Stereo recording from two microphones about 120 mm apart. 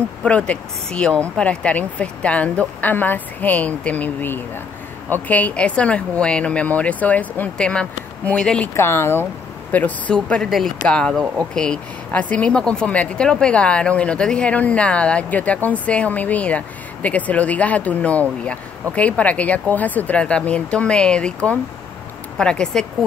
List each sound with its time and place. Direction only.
0.2 s speech: 10° left (ahead or behind)
8.7 s speech: 20° left (ahead or behind)